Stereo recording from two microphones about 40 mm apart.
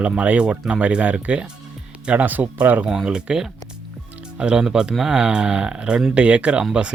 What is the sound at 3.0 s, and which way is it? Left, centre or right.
Speech, right.